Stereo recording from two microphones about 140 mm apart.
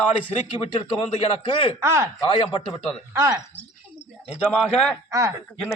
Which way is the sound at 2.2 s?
40° left (ahead or behind).